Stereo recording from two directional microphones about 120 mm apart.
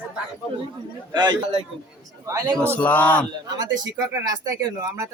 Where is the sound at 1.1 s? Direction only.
35° right (ahead or behind).